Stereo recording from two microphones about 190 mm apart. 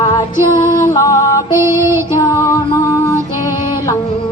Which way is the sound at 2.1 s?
15° left (ahead or behind).